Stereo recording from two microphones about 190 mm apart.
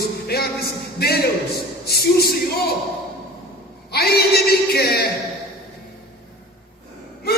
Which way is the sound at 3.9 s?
55° left (ahead or behind).